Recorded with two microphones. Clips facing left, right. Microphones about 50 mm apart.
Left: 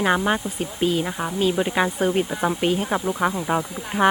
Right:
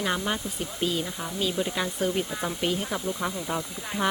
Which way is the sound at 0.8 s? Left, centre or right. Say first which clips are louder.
Left 7 dB; left.